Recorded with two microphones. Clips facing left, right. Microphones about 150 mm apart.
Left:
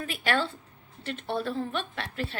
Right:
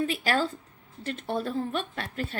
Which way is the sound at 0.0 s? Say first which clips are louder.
Right 2 dB; 35° right (ahead or behind).